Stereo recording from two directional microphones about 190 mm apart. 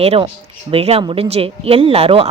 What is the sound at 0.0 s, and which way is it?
Speech, 30° right (ahead or behind).